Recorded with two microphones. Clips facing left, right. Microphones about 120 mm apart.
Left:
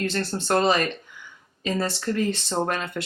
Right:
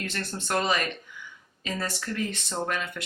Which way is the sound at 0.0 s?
30° left (ahead or behind).